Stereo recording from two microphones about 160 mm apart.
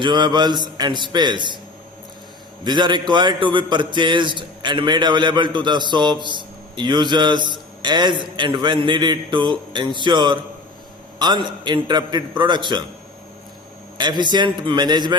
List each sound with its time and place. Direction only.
0.0 s a man's voice: 30° right (ahead or behind)
2.6 s a man's voice: 30° right (ahead or behind)
14.0 s a man's voice: 30° right (ahead or behind)